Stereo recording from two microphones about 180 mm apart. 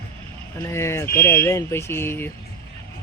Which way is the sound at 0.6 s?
15° left (ahead or behind).